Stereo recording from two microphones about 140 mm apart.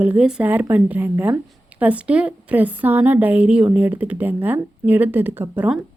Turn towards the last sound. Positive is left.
turn(degrees=-15)  # may be behind; listen again after turning